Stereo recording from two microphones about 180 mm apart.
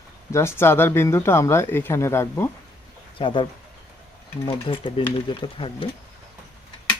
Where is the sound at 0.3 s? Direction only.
15° left (ahead or behind).